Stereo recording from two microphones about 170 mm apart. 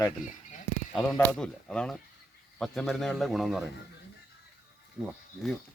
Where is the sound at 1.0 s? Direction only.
5° left (ahead or behind).